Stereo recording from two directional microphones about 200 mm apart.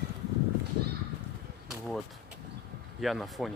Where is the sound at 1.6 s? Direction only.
Centre (ahead or behind).